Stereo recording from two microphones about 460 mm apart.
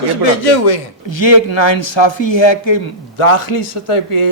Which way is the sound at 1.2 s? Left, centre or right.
Left.